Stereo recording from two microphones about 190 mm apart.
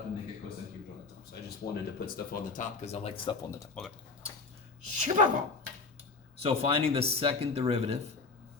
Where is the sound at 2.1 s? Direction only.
40° left (ahead or behind).